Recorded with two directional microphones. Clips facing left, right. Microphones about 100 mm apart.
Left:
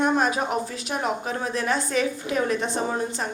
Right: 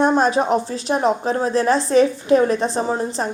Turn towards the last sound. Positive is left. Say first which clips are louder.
# right 5 dB
turn(degrees=-35)  # may be behind; listen again after turning